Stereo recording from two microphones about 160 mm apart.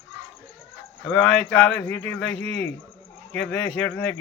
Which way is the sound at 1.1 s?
5° left (ahead or behind).